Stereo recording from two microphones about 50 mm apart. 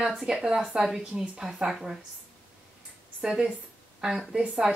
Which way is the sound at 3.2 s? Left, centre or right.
Centre.